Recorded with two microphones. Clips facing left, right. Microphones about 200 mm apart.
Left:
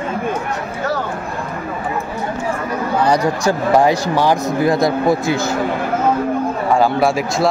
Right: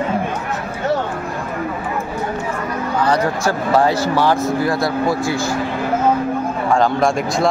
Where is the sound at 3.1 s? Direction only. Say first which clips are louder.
Left 2 dB; 15° left (ahead or behind).